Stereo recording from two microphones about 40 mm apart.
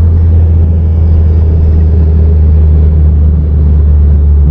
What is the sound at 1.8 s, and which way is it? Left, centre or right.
Vehicle, centre.